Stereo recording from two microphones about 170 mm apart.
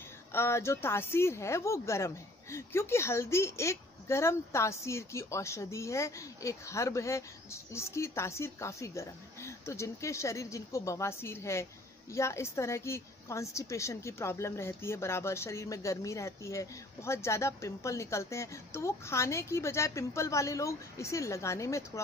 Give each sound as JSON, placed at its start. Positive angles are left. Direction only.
{"t": 0.3, "sound": "speech", "side_deg": 15}